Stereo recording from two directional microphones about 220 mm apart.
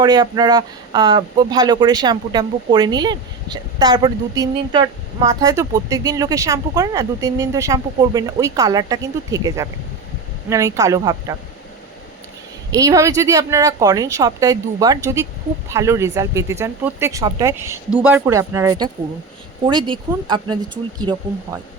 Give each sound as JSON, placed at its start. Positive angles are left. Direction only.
{"t": 0.0, "sound": "speech", "side_deg": -20}
{"t": 12.7, "sound": "speech", "side_deg": -15}